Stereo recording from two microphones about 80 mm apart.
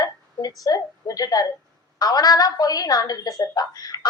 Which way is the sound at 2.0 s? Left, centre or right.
Left.